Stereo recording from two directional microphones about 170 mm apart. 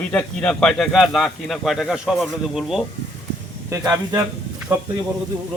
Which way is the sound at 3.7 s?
20° right (ahead or behind).